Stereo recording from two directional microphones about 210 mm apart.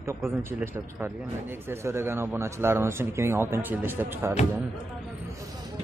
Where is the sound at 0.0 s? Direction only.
15° right (ahead or behind).